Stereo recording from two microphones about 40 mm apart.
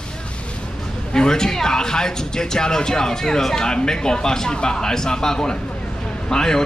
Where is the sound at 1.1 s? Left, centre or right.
Centre.